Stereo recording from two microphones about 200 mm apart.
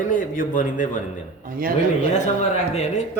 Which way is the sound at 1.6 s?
45° right (ahead or behind).